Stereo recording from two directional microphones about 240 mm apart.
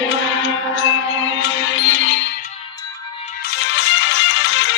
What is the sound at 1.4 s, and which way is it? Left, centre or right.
Music, left.